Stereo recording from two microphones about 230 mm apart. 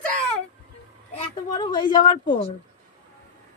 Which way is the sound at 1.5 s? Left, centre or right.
Centre.